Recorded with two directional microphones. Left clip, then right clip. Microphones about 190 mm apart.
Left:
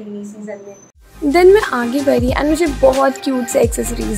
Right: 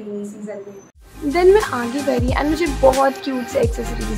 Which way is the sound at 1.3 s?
25° left (ahead or behind).